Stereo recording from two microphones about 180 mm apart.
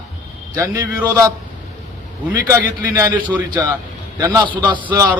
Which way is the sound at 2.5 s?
20° right (ahead or behind).